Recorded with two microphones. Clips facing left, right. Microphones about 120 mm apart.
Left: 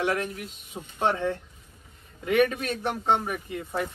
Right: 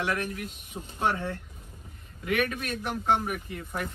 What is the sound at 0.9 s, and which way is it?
A man's voice, 25° left (ahead or behind).